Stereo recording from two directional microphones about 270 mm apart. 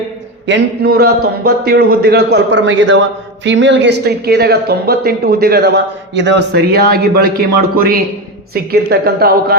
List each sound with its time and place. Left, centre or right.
0.4 s speech: right